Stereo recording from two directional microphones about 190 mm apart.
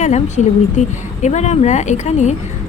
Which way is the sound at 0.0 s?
40° left (ahead or behind).